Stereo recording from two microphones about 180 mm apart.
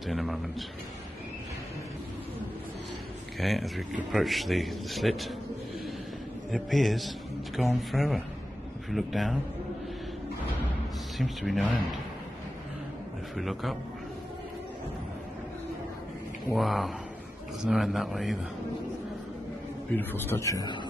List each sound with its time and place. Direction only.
0.0 s a sound: centre (ahead or behind)
3.3 s speech: centre (ahead or behind)
6.5 s speech: centre (ahead or behind)
11.1 s speech: centre (ahead or behind)
13.4 s speech: centre (ahead or behind)
16.5 s speech: centre (ahead or behind)
20.0 s speech: 10° left (ahead or behind)